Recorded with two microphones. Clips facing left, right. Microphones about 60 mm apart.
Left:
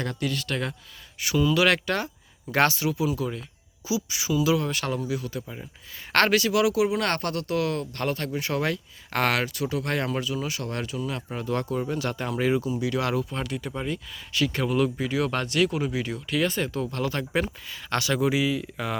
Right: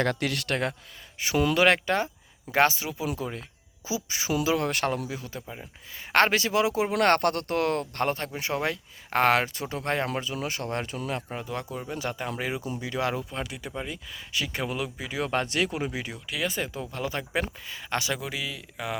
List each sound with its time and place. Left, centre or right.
0.0 s speech: right
1.2 s speech: right
4.5 s speech: right
5.0 s speech: right
7.0 s speech: right
11.3 s speech: centre
14.3 s speech: centre
18.2 s speech: centre